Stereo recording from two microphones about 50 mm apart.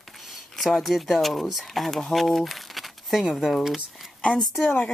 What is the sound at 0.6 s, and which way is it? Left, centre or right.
Speech, centre.